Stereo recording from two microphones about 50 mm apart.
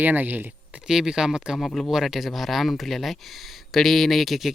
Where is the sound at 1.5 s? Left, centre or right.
Centre.